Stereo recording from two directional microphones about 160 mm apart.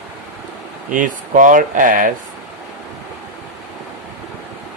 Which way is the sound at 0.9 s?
55° right (ahead or behind).